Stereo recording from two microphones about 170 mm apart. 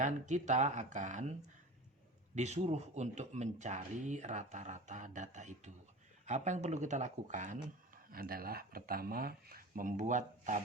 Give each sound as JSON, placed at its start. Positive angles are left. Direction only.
{"t": 0.0, "sound": "speech", "side_deg": -45}
{"t": 2.3, "sound": "speech", "side_deg": -40}
{"t": 8.1, "sound": "speech", "side_deg": -60}